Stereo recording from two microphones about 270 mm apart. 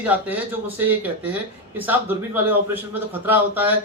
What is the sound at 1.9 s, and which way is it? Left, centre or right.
Speech, centre.